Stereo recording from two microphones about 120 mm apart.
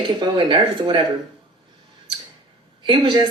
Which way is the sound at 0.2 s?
40° right (ahead or behind).